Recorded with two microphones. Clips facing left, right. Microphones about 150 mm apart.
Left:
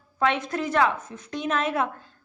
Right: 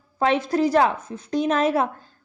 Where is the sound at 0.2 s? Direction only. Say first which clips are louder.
Right 5 dB; 35° right (ahead or behind).